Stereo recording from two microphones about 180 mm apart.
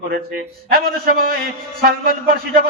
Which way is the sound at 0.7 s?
55° right (ahead or behind).